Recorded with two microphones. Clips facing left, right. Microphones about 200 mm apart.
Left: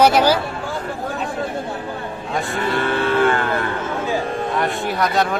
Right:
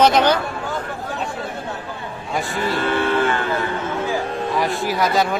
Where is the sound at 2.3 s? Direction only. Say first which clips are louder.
Even; centre (ahead or behind).